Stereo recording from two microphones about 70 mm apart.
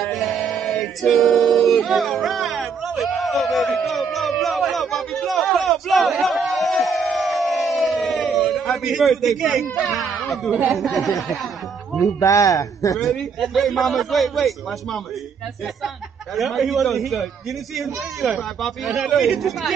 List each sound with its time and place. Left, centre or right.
0.0 s a sound: centre
0.5 s male singing: centre
1.9 s a man's voice: centre
12.2 s a man's voice: left
12.9 s a man's voice: centre
16.3 s a man's voice: centre